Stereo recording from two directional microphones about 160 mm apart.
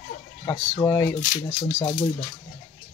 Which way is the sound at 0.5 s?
15° left (ahead or behind).